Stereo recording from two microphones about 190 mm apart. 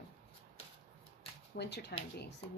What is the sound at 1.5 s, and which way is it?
Speech, 60° left (ahead or behind).